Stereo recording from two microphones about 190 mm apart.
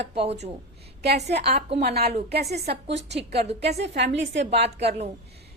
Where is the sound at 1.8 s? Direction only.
55° right (ahead or behind).